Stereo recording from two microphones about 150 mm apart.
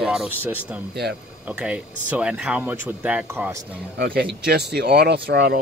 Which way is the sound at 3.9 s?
90° right.